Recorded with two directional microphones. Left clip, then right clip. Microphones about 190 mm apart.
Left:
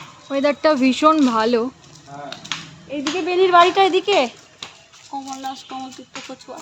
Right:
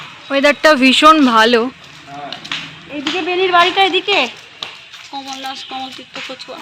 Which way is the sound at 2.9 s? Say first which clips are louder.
Right 3 dB; 55° left (ahead or behind).